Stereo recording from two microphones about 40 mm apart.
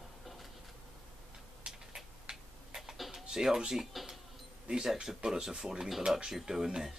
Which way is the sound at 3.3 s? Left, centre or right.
Centre.